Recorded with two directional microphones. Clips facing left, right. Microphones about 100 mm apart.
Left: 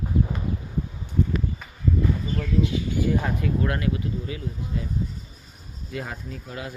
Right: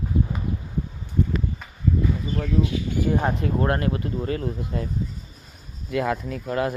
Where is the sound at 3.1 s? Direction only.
35° right (ahead or behind); by 4.9 s 55° right (ahead or behind).